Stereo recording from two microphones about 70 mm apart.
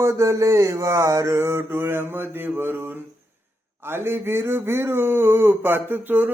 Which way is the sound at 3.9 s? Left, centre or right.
Right.